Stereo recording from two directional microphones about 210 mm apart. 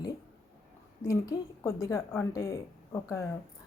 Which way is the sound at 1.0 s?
15° left (ahead or behind).